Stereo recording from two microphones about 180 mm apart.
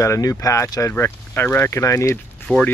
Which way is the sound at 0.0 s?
15° left (ahead or behind).